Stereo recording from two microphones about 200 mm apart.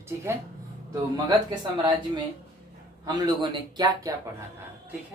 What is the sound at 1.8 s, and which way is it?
Speech, 20° right (ahead or behind).